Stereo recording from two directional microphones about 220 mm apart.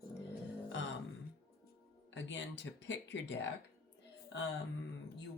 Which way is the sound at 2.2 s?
55° left (ahead or behind).